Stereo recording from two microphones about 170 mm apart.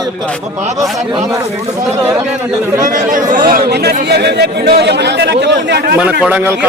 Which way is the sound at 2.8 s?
50° right (ahead or behind).